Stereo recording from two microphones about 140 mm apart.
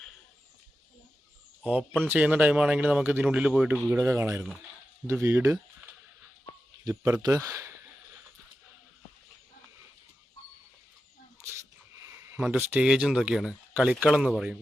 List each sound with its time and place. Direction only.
1.6 s speech: 10° right (ahead or behind)
6.8 s a sound: 25° right (ahead or behind)
11.9 s speech: 20° right (ahead or behind); by 14.6 s 5° right (ahead or behind)